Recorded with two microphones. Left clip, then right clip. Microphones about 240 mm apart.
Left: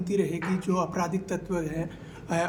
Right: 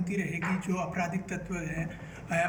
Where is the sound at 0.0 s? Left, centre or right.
Centre.